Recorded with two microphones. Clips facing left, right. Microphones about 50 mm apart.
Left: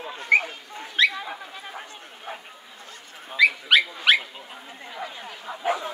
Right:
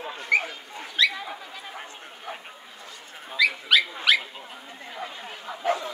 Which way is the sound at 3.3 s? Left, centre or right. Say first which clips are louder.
Left 3 dB; left.